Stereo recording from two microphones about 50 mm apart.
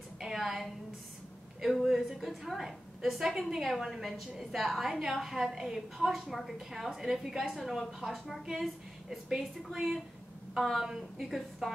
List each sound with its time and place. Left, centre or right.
0.2 s a sound: centre
1.6 s a woman's voice: centre
9.8 s a woman's voice: centre